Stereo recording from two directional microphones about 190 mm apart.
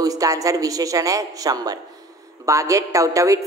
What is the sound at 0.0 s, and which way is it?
A man's voice, 20° right (ahead or behind).